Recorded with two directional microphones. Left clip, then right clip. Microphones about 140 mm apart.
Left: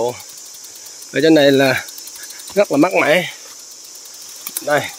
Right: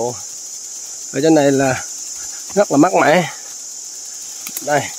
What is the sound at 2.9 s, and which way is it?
Speech, 45° right (ahead or behind).